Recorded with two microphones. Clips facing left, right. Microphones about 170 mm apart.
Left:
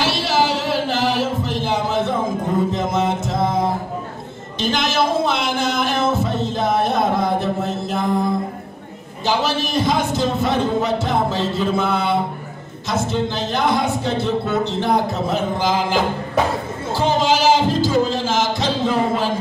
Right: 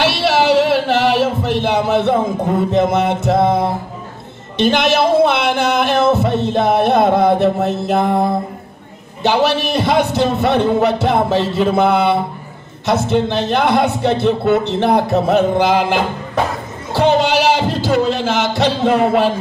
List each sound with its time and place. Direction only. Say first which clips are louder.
0.0 s singing: right 4 dB; 65° right (ahead or behind)
4.6 s speech: right 6 dB; 65° right (ahead or behind)
16.9 s a sound: right 5 dB; 65° right (ahead or behind)